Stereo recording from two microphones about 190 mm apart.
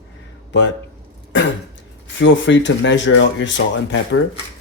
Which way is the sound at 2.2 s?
75° left (ahead or behind).